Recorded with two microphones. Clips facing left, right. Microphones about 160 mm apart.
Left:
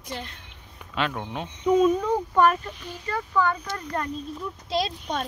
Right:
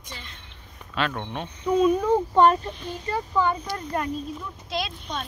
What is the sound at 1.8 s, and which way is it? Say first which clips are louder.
Speech: right 2 dB; centre (ahead or behind).